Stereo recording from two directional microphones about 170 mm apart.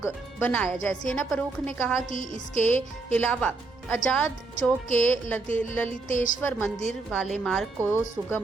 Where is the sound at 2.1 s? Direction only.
50° left (ahead or behind).